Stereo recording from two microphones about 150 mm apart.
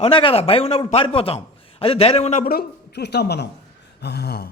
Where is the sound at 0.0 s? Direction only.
35° left (ahead or behind).